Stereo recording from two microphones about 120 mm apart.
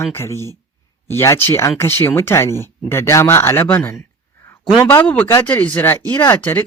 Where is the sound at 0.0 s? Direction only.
20° left (ahead or behind).